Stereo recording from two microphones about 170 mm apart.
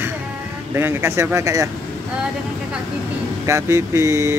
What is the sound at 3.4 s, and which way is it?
Speech, 15° right (ahead or behind).